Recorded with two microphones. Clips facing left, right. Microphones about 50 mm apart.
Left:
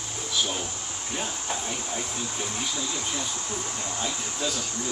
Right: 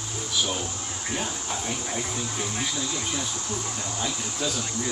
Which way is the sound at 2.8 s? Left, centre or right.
Centre.